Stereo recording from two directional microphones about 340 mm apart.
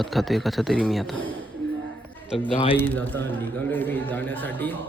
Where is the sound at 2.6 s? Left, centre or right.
Centre.